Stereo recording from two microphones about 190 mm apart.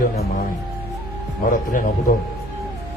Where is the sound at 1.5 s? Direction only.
45° left (ahead or behind).